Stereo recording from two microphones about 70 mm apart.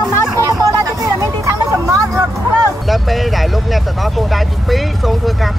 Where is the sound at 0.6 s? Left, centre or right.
Right.